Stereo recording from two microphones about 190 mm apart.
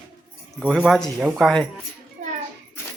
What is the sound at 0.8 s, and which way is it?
Speech, centre (ahead or behind).